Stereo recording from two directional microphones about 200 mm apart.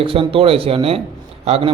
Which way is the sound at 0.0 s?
25° right (ahead or behind).